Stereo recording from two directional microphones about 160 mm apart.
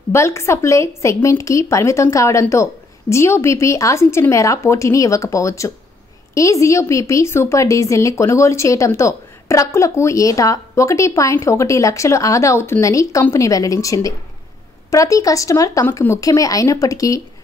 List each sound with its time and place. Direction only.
0.1 s a woman's voice: 15° left (ahead or behind)